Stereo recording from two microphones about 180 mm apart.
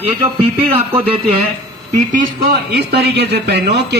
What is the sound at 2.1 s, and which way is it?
A man's voice, 55° right (ahead or behind).